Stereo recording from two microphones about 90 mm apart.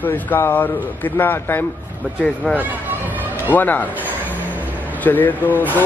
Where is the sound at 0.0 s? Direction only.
20° left (ahead or behind).